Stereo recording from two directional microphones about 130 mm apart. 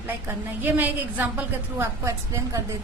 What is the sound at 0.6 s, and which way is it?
A woman's voice, 15° right (ahead or behind).